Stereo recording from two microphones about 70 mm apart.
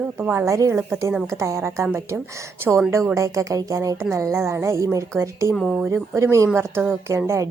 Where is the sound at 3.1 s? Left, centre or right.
Right.